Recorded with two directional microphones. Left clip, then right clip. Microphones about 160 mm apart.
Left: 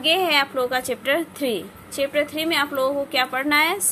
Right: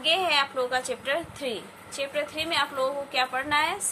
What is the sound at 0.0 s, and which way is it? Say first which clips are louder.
A woman's voice: left 4 dB; 50° left (ahead or behind).